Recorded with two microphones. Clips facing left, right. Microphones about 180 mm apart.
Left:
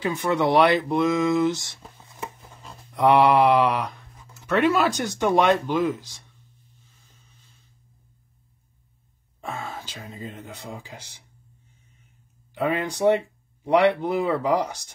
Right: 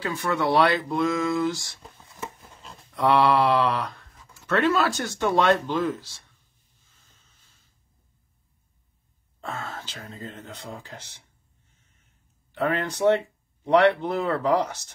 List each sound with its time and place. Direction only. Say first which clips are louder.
0.0 s speech: left 3 dB; 20° left (ahead or behind)
2.9 s mantra: left 3 dB; 15° left (ahead or behind)
4.5 s speech: left 2 dB; 15° left (ahead or behind)
9.4 s speech: left 1 dB; 15° left (ahead or behind)
12.5 s speech: left 1 dB; 10° left (ahead or behind)